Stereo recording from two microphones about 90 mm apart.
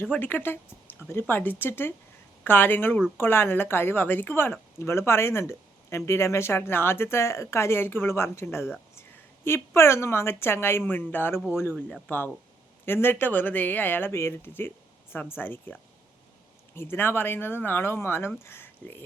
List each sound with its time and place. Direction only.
0.0 s speech: 20° left (ahead or behind)
16.7 s speech: 25° left (ahead or behind)